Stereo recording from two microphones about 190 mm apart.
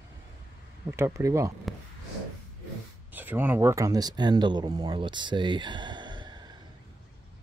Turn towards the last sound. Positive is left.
turn(degrees=-25)  # may be behind; listen again after turning